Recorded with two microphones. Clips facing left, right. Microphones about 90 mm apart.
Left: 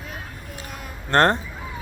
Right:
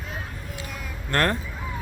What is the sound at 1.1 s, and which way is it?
Speech, 25° left (ahead or behind).